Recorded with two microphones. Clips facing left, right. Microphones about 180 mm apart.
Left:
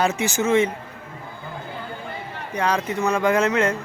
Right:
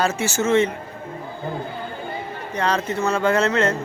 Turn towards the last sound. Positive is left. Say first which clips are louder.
# even
turn(degrees=10)  # may be behind; listen again after turning